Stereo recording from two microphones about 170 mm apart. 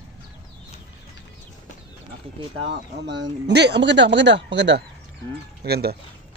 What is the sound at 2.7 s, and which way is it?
Speech, 90° right.